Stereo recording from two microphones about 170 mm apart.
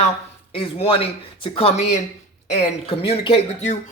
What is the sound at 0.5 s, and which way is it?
Speech, 35° left (ahead or behind).